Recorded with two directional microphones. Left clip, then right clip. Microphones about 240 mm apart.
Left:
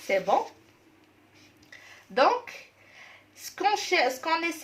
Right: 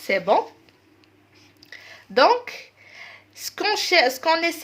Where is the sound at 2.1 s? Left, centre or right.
Right.